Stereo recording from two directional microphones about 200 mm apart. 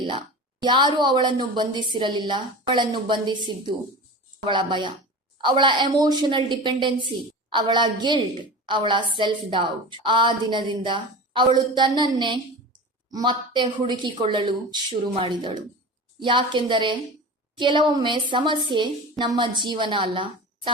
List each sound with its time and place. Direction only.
0.0 s a woman's voice: 25° right (ahead or behind)